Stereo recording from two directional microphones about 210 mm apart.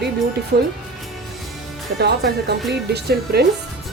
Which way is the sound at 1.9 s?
50° right (ahead or behind).